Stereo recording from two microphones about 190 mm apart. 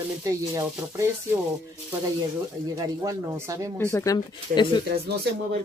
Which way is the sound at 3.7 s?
15° left (ahead or behind).